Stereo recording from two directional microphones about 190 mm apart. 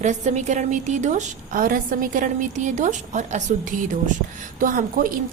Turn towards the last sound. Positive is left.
turn(degrees=-45)  # may be behind; listen again after turning